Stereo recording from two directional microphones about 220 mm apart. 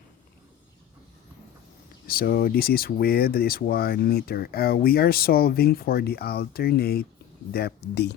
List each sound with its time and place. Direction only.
2.0 s speech: 45° left (ahead or behind)